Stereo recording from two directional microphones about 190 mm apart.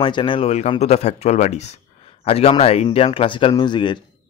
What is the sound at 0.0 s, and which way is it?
Speech, 25° left (ahead or behind).